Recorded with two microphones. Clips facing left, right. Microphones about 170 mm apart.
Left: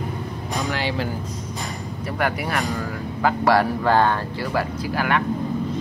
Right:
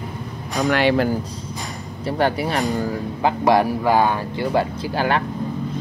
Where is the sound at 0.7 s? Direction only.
65° right (ahead or behind).